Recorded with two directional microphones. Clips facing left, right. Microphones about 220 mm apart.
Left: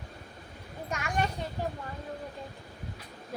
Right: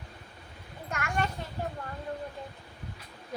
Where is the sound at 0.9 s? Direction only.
15° left (ahead or behind).